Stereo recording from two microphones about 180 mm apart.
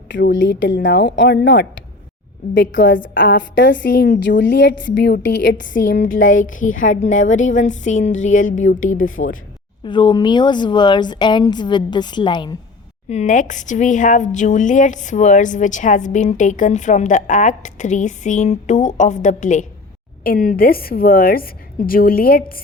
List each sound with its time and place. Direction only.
0.1 s a woman's voice: 90° left; by 1.6 s 65° left (ahead or behind)
2.6 s a woman's voice: 80° left
3.8 s a woman's voice: 65° left (ahead or behind); by 5.6 s 85° left
5.6 s speech: 45° left (ahead or behind)
9.0 s a woman's voice: 90° left
9.8 s a woman's voice: 25° left (ahead or behind)
13.1 s a woman's voice: 40° left (ahead or behind)